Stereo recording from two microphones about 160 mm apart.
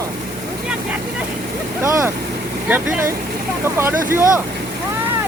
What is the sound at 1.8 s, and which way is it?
Speech, 15° right (ahead or behind).